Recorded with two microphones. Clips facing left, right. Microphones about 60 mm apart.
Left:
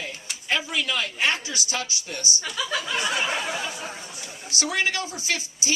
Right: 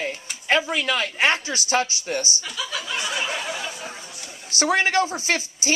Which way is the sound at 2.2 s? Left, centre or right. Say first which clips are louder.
Left 1 dB; left.